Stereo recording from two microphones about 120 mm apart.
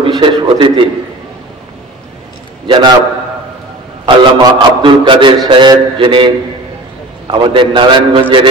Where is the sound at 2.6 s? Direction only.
40° right (ahead or behind).